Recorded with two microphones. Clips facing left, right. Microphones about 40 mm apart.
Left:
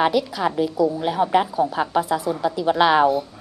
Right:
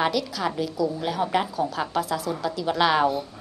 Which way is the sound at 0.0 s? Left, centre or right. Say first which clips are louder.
Left 5 dB; centre.